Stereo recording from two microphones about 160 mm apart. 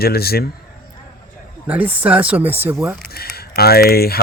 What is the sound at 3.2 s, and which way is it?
Speech, 75° left (ahead or behind).